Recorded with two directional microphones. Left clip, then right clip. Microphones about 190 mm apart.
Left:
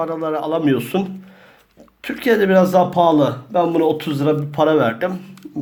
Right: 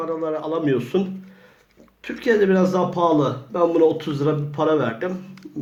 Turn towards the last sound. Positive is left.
turn(degrees=45)  # may be behind; listen again after turning